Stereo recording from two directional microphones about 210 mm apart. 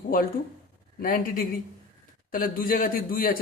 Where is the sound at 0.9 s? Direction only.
40° left (ahead or behind).